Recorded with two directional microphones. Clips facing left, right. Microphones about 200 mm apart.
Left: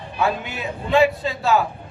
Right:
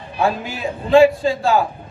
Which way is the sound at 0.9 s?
30° right (ahead or behind).